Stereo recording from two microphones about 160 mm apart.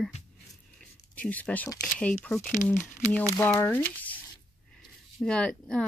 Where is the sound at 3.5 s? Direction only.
10° left (ahead or behind).